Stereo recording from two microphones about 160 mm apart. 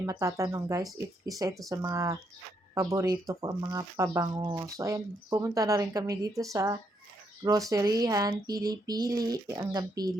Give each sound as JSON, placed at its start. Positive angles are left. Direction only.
{"t": 0.0, "sound": "speech", "side_deg": -20}